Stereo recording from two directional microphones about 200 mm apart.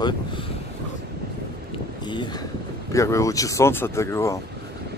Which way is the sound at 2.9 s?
15° left (ahead or behind).